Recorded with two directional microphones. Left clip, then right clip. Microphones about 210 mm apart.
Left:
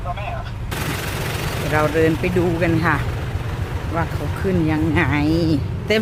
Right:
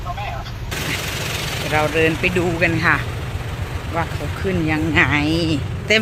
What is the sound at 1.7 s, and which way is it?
Speech, 10° left (ahead or behind).